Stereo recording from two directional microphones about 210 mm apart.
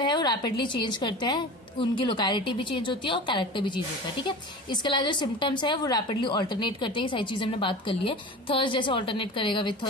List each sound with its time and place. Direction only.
0.0 s a woman's voice: 20° left (ahead or behind)